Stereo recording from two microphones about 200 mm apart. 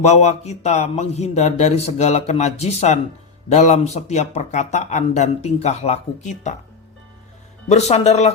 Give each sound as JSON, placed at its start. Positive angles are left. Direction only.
{"t": 0.0, "sound": "speech", "side_deg": 35}
{"t": 7.7, "sound": "speech", "side_deg": 35}